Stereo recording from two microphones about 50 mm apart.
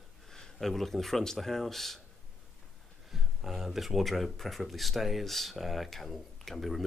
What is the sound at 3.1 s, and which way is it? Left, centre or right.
Speech, centre.